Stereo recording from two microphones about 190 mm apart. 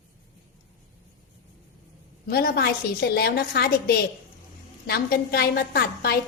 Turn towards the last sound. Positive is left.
turn(degrees=55)  # may be behind; listen again after turning